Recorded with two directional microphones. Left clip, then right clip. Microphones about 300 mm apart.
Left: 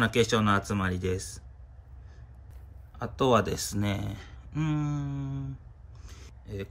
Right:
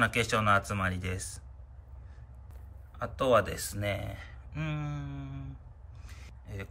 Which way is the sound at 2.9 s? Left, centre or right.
Centre.